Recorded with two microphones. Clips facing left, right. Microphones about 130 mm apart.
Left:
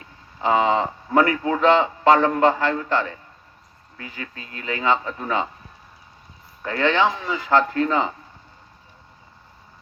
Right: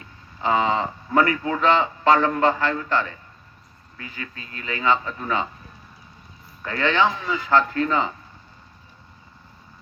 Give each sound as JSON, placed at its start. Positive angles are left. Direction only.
{"t": 0.0, "sound": "speech", "side_deg": 20}
{"t": 6.6, "sound": "speech", "side_deg": 20}